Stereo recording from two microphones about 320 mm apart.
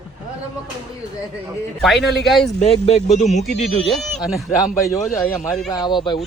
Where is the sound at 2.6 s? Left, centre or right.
Centre.